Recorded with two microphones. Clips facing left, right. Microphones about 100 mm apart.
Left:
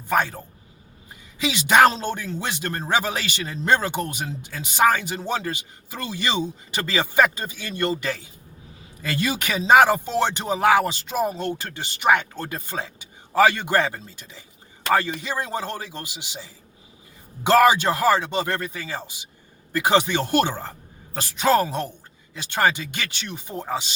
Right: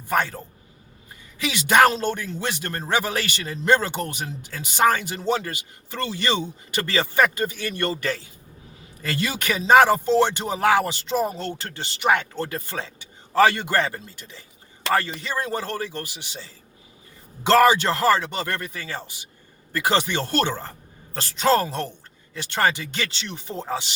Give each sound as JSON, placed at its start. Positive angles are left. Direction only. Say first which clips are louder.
{"t": 0.1, "sound": "speech", "louder": "left 1 dB", "side_deg": 15}
{"t": 1.4, "sound": "speech", "louder": "left 1 dB", "side_deg": 20}